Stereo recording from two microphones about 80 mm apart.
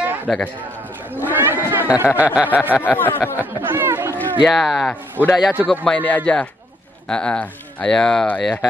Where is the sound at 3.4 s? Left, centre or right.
Right.